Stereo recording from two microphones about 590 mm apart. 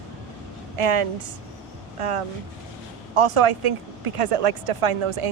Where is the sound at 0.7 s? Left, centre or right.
Right.